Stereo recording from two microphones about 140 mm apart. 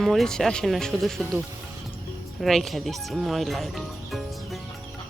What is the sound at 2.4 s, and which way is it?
Speech, centre (ahead or behind).